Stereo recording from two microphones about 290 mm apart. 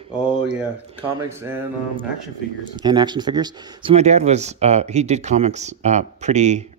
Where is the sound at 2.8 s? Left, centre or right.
Centre.